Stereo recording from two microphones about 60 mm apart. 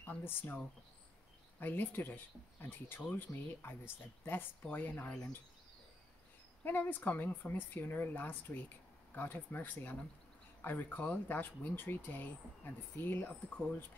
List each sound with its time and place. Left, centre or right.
0.0 s speech: left
1.6 s speech: left
6.6 s speech: left